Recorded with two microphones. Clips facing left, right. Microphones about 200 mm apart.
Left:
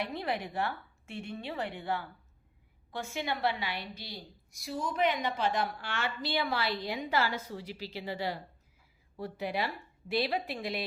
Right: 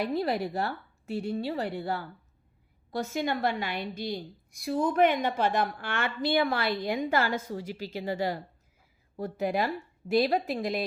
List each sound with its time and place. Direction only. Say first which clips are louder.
0.1 s a woman's voice: right 7 dB; 40° right (ahead or behind)